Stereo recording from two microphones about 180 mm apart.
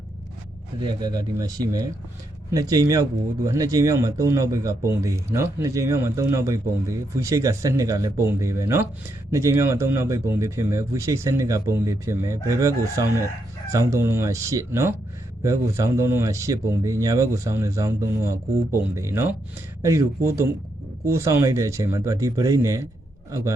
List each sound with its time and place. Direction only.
0.8 s speech: 25° right (ahead or behind)